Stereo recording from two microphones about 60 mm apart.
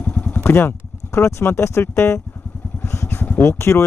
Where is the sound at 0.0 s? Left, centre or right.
Left.